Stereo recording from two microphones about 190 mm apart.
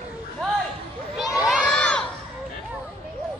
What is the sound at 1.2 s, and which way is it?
Crowd, centre (ahead or behind).